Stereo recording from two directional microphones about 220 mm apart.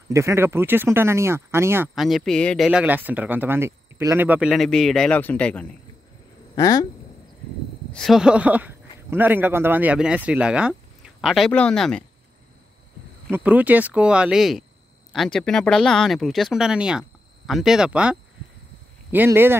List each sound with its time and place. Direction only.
0.1 s speech: 10° right (ahead or behind)
2.0 s speech: centre (ahead or behind)
6.5 s speech: 15° left (ahead or behind)
7.9 s speech: centre (ahead or behind)
13.3 s speech: 5° right (ahead or behind)
19.1 s speech: 10° right (ahead or behind)